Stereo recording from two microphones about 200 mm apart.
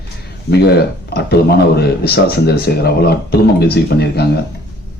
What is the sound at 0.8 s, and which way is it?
Speech, 55° left (ahead or behind).